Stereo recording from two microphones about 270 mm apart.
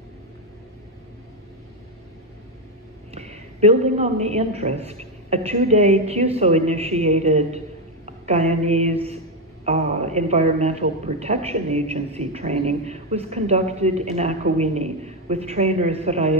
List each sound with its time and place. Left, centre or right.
3.1 s a man's voice: right